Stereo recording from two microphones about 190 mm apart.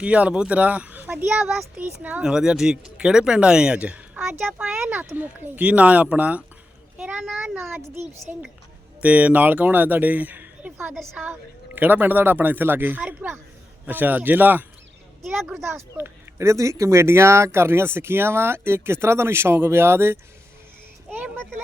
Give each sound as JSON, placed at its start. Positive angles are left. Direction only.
{"t": 0.0, "sound": "a child's voice", "side_deg": -5}
{"t": 7.7, "sound": "speech", "side_deg": -10}
{"t": 21.1, "sound": "a sound", "side_deg": -10}